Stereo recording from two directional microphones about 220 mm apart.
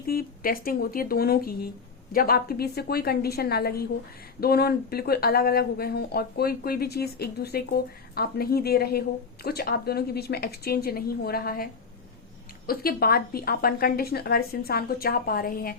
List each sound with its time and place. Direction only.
0.1 s speech: 40° left (ahead or behind)